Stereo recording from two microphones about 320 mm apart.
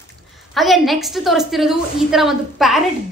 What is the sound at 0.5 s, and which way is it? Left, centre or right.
A woman's voice, centre.